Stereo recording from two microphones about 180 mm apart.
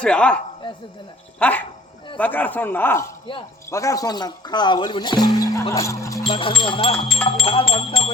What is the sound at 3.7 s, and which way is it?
Speech, 15° left (ahead or behind).